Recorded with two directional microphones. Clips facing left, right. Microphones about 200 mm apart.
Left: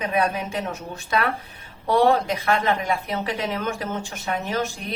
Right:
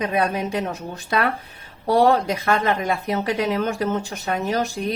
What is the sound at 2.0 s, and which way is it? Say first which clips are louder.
Speech: right 1 dB; 40° right (ahead or behind).